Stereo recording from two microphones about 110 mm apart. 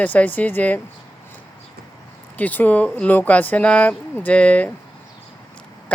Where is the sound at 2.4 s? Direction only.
15° left (ahead or behind).